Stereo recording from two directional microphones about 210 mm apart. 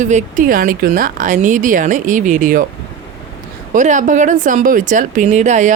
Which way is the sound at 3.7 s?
35° right (ahead or behind).